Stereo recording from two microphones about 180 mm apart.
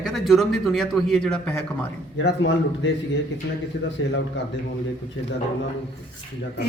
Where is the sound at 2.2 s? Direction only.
90° left.